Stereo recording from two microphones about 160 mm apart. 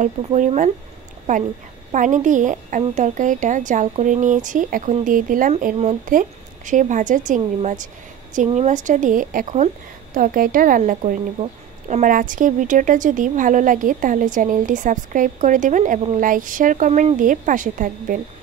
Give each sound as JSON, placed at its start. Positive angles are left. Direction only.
{"t": 0.0, "sound": "a woman's voice", "side_deg": -45}
{"t": 1.9, "sound": "a woman's voice", "side_deg": -50}